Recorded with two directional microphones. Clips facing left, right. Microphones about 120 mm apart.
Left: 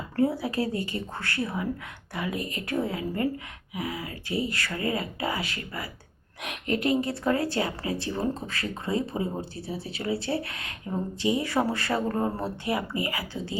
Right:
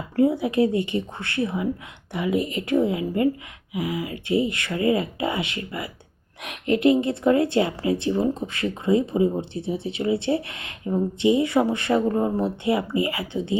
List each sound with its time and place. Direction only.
0.2 s speech: 20° right (ahead or behind)